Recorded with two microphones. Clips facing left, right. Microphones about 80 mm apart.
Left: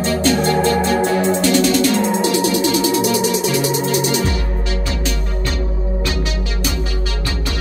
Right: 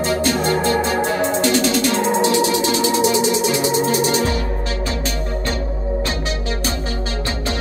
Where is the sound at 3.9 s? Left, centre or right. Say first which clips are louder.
Even; right.